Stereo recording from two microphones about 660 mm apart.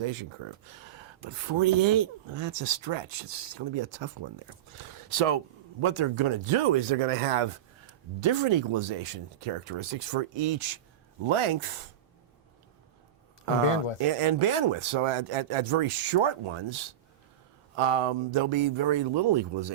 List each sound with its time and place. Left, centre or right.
0.0 s speech: right
4.8 s speech: right
14.0 s speech: right
17.7 s speech: right